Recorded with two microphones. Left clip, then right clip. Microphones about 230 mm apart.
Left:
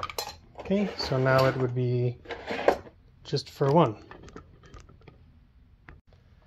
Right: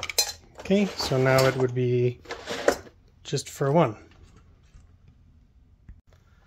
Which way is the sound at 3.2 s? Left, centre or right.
Right.